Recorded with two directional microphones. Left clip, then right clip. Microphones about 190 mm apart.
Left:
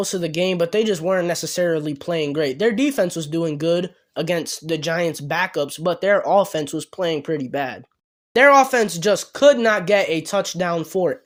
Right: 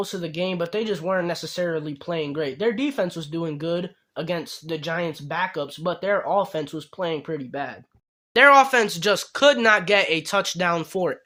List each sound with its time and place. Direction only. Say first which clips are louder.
0.0 s speech: left 6 dB; 35° left (ahead or behind)